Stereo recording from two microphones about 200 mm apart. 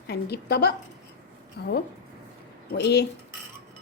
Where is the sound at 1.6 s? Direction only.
55° left (ahead or behind).